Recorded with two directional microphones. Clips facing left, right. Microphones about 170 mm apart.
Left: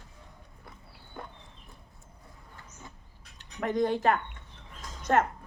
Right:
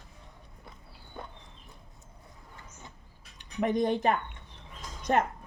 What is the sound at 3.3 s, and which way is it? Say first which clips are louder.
Speech: right 1 dB; 15° right (ahead or behind).